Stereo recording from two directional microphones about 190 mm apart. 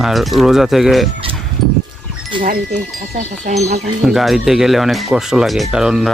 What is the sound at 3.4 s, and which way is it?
Speech, 35° right (ahead or behind).